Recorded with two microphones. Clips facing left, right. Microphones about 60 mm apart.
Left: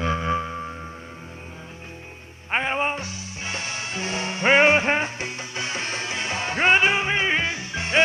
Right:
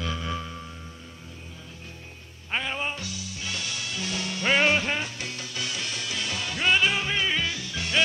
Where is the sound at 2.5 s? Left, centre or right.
Left.